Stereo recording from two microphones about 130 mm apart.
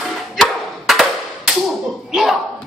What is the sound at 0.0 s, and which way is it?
Clapping, centre (ahead or behind).